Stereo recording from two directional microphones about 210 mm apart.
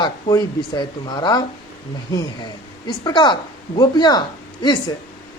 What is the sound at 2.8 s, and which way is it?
A man's voice, 20° left (ahead or behind).